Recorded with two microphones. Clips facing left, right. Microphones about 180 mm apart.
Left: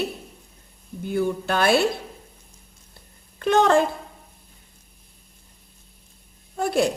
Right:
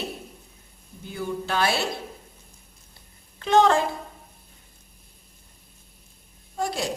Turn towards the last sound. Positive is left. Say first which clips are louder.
# left 7 dB
turn(degrees=55)  # may be behind; listen again after turning